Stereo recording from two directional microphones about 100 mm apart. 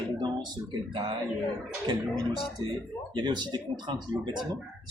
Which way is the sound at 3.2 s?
45° right (ahead or behind).